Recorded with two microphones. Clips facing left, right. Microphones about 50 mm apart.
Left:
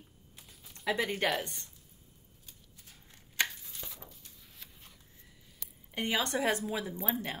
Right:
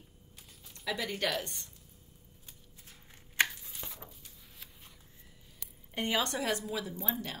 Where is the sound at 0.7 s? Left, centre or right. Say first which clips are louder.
Left 4 dB; centre.